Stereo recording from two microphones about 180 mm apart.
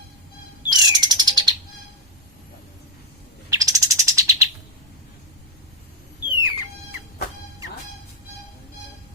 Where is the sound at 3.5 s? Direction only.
20° right (ahead or behind).